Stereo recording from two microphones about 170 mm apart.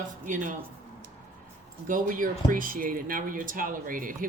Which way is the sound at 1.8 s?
50° right (ahead or behind).